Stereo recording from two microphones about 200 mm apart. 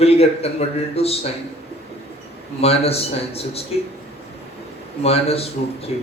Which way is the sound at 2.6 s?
30° left (ahead or behind).